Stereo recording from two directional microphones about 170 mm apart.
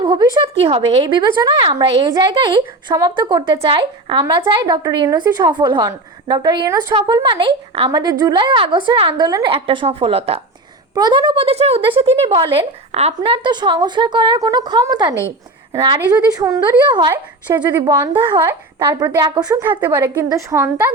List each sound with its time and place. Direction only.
0.0 s a woman's voice: 30° right (ahead or behind)
10.9 s a woman's voice: 25° right (ahead or behind)